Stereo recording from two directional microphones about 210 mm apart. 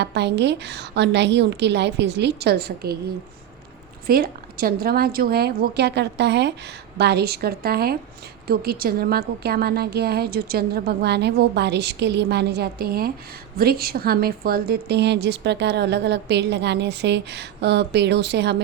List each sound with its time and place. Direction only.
0.0 s a woman's voice: 55° right (ahead or behind)
4.0 s a woman's voice: 45° right (ahead or behind)